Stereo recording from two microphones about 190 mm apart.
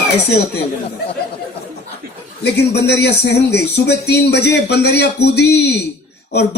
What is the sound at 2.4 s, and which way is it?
Speech, 60° left (ahead or behind).